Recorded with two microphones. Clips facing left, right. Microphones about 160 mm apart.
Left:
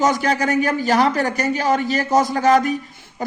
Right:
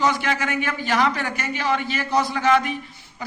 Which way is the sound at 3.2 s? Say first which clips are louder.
Left 8 dB; 45° left (ahead or behind).